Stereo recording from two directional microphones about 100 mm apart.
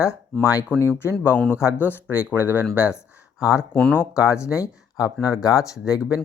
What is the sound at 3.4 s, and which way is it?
Speech, 35° left (ahead or behind).